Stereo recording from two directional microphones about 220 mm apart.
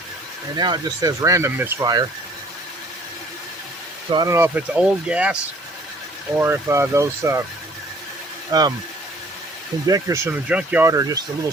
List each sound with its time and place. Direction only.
0.5 s speech: 20° right (ahead or behind)
4.1 s speech: 15° right (ahead or behind)
8.5 s speech: 15° right (ahead or behind)
9.8 s speech: 15° right (ahead or behind)